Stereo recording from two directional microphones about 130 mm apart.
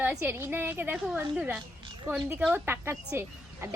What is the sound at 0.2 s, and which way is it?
A woman's voice, 20° right (ahead or behind).